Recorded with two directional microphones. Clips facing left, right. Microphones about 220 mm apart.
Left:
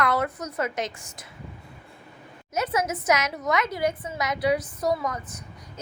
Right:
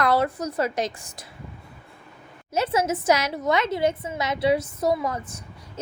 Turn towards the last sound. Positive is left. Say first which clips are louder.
# right 2 dB
turn(degrees=-30)  # may be behind; listen again after turning